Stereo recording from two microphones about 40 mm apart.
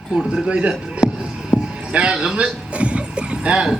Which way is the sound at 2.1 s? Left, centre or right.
Centre.